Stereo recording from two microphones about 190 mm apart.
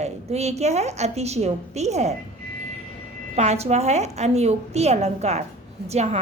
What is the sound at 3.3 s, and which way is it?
Speech, 35° right (ahead or behind).